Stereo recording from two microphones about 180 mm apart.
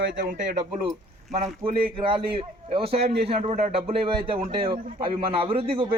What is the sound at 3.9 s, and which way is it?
A man's voice, 30° right (ahead or behind).